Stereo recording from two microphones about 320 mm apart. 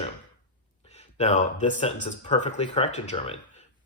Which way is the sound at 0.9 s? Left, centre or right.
Centre.